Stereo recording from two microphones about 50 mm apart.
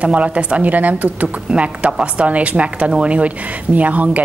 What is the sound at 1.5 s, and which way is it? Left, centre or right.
A woman's voice, right.